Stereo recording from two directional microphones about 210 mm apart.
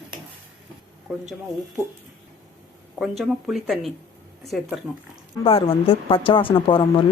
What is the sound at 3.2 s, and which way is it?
Speech, centre (ahead or behind).